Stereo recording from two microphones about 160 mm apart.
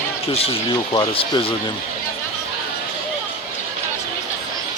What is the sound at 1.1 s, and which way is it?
Speech, 35° left (ahead or behind).